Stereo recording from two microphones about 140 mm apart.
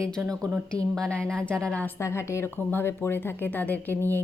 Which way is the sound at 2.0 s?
20° left (ahead or behind).